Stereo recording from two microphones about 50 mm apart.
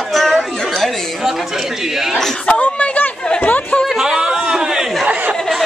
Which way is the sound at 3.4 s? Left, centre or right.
Left.